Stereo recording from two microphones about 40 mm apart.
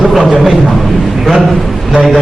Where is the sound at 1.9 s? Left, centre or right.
Centre.